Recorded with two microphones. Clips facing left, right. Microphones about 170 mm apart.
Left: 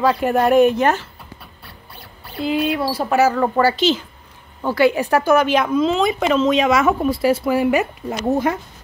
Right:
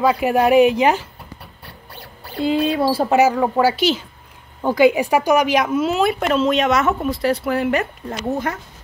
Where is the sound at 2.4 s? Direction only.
25° right (ahead or behind); by 8.1 s 5° left (ahead or behind).